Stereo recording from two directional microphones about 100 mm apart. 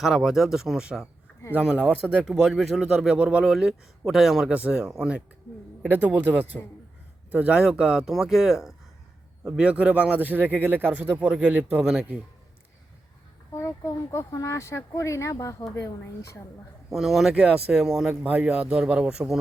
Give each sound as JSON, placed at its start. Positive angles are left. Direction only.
{"t": 0.0, "sound": "a man's voice", "side_deg": -5}
{"t": 13.5, "sound": "speech", "side_deg": 35}
{"t": 16.9, "sound": "a man's voice", "side_deg": 0}